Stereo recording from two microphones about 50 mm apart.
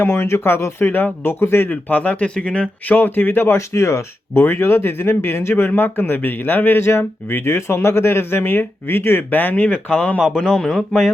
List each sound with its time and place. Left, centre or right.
0.0 s speech: left
2.9 s speech: left
3.4 s speech: left
4.5 s speech: left
10.3 s speech: centre